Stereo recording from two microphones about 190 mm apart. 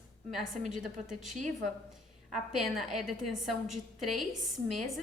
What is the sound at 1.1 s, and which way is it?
A woman's voice, centre (ahead or behind).